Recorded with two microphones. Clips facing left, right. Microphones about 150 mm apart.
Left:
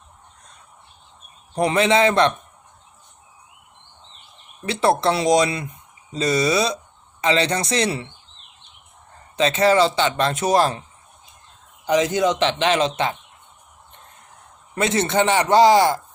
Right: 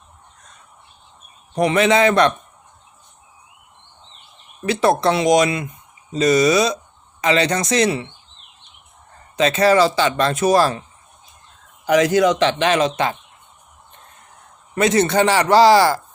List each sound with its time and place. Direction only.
1.5 s speech: 30° left (ahead or behind)
4.6 s speech: 30° left (ahead or behind)
9.3 s speech: 25° left (ahead or behind)
12.1 s speech: 20° left (ahead or behind)
14.8 s speech: 25° left (ahead or behind)